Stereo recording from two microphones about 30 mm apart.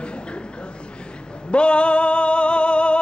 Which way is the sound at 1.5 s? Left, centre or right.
Left.